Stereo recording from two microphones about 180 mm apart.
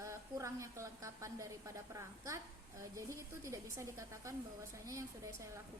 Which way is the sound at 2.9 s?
15° right (ahead or behind).